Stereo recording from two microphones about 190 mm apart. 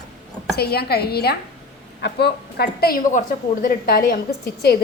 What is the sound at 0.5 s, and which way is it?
A woman's voice, 55° left (ahead or behind).